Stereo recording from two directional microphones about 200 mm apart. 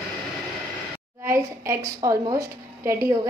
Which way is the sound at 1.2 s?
15° right (ahead or behind).